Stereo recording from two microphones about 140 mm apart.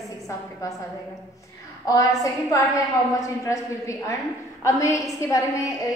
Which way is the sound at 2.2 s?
25° left (ahead or behind).